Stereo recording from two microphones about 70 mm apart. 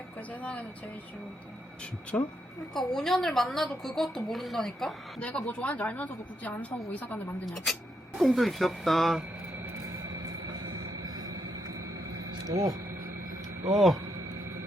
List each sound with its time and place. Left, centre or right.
0.2 s a woman's voice: left
2.1 s a woman's voice: left
2.7 s a woman's voice: centre
5.2 s a woman's voice: centre
7.4 s a woman's voice: centre
11.0 s a sound: right
12.5 s speech: right
13.7 s a woman's voice: centre